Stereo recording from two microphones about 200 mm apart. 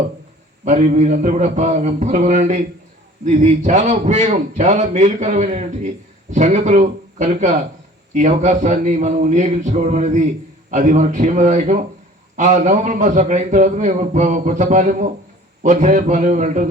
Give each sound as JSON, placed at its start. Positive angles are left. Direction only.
{"t": 0.6, "sound": "a man's voice", "side_deg": -35}